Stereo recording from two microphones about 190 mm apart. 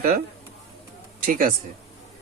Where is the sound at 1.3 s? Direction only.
50° right (ahead or behind).